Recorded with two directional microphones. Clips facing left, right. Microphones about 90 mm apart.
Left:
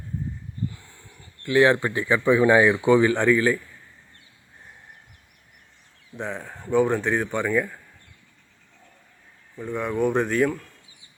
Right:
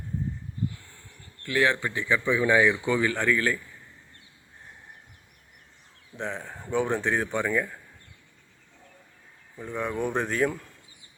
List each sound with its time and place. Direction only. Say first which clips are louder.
1.6 s speech: left 3 dB; 35° left (ahead or behind)
2.8 s a man's voice: left 7 dB; 20° left (ahead or behind)
6.1 s speech: left 2 dB; 5° left (ahead or behind)
9.6 s speech: left 5 dB; centre (ahead or behind)